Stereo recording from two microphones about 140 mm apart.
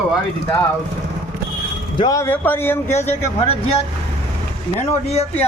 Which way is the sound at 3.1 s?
45° left (ahead or behind).